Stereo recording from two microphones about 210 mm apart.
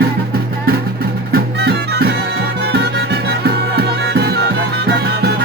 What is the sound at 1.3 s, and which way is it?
Music, 50° right (ahead or behind).